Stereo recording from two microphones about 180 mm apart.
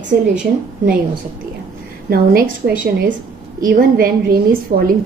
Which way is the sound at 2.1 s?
55° right (ahead or behind).